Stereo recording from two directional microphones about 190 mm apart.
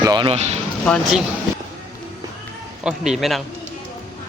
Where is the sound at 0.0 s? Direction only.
20° right (ahead or behind).